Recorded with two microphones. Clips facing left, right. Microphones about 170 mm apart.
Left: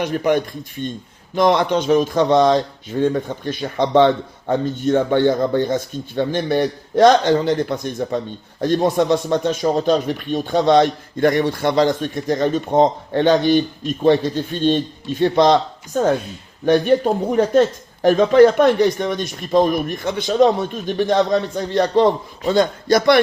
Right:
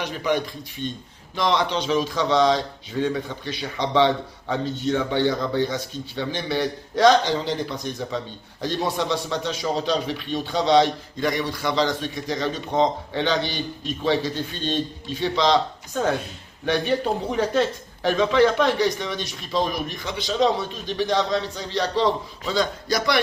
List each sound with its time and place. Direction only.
0.0 s a man's voice: 50° left (ahead or behind)
16.6 s a man's voice: 45° left (ahead or behind)